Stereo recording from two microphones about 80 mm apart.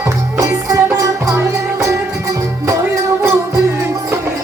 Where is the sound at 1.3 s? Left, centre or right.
Right.